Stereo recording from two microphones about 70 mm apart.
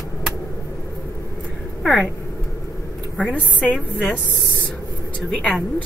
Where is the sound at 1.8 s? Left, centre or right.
Centre.